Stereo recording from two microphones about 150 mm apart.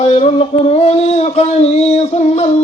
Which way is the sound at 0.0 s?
45° left (ahead or behind).